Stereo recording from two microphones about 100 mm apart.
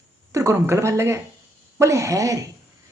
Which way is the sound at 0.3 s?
30° right (ahead or behind).